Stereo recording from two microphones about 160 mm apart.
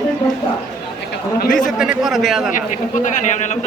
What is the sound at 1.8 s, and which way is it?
Speech, 5° right (ahead or behind).